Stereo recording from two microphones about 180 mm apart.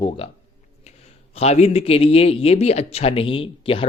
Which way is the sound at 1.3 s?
35° left (ahead or behind).